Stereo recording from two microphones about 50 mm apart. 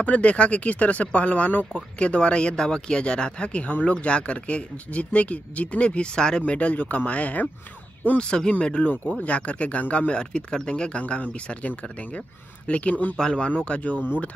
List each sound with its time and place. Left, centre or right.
0.0 s speech: left
6.4 s speech: left
8.2 s speech: centre
13.2 s speech: centre